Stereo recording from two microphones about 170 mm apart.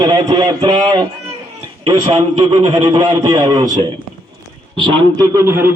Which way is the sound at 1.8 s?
25° right (ahead or behind).